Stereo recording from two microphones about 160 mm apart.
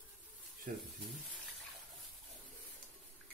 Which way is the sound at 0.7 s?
60° right (ahead or behind).